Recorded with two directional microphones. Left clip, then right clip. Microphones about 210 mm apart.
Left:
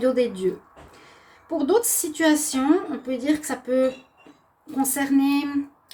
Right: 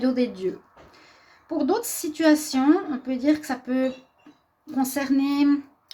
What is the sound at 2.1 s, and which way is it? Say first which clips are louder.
Speech: right 1 dB; 40° right (ahead or behind).